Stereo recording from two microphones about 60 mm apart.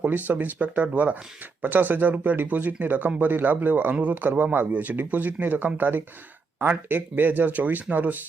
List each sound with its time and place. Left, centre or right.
0.0 s speech: right